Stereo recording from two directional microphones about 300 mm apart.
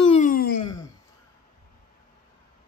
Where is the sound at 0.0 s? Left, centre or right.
Left.